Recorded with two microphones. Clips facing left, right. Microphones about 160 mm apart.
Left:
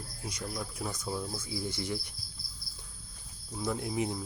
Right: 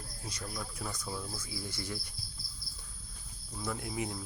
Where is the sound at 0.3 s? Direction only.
15° left (ahead or behind).